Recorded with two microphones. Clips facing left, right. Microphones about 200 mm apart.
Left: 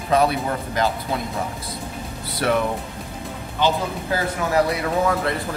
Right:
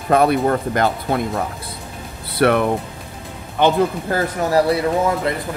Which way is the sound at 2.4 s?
60° right (ahead or behind).